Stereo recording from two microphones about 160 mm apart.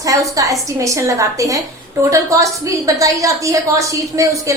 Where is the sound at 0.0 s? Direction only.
20° right (ahead or behind).